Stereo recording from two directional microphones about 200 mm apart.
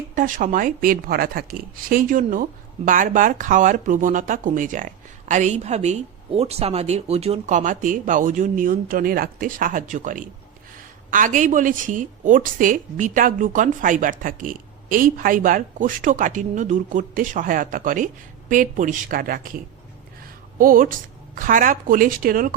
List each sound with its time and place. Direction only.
0.1 s speech: 40° right (ahead or behind)
20.6 s a woman's voice: 45° right (ahead or behind)